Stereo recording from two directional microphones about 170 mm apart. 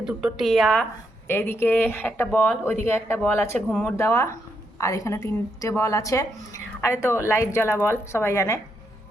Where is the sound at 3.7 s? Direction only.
Centre (ahead or behind).